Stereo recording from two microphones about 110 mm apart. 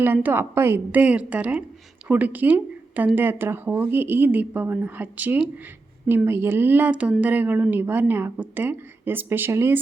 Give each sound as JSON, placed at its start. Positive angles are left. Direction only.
{"t": 0.0, "sound": "a woman's voice", "side_deg": -15}